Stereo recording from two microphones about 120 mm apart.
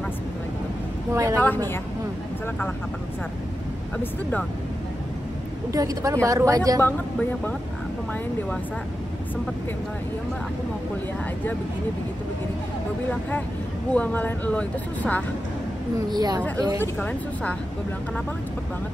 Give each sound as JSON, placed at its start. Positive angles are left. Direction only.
{"t": 1.1, "sound": "speech", "side_deg": -25}
{"t": 4.0, "sound": "speech", "side_deg": 15}
{"t": 5.7, "sound": "speech", "side_deg": -30}
{"t": 6.8, "sound": "speech", "side_deg": 15}
{"t": 13.9, "sound": "speech", "side_deg": 10}
{"t": 16.1, "sound": "speech", "side_deg": -35}
{"t": 16.8, "sound": "speech", "side_deg": 15}